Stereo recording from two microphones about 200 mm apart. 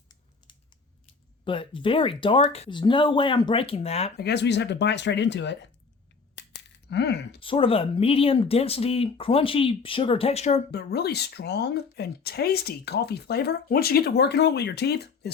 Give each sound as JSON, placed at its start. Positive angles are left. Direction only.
{"t": 1.5, "sound": "speech", "side_deg": 25}
{"t": 4.2, "sound": "speech", "side_deg": 55}
{"t": 6.9, "sound": "speech", "side_deg": 55}
{"t": 7.3, "sound": "speech", "side_deg": 25}
{"t": 10.7, "sound": "speech", "side_deg": 55}